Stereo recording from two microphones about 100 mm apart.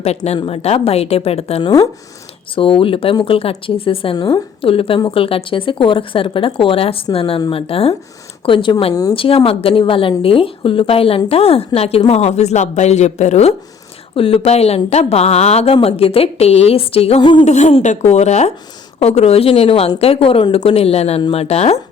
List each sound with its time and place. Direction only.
0.4 s speech: 85° left
2.6 s speech: 65° left (ahead or behind)
8.4 s speech: 60° left (ahead or behind)
11.3 s speech: 90° left
14.2 s speech: 75° left (ahead or behind)
17.2 s speech: 50° left (ahead or behind)
17.4 s a woman's voice: 90° left
21.2 s speech: 80° left